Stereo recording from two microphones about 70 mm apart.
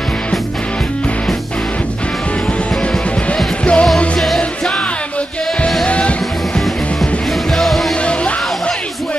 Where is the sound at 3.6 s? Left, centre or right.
Centre.